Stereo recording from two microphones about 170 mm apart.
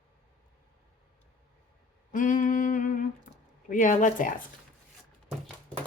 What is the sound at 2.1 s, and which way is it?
Speech, 50° left (ahead or behind).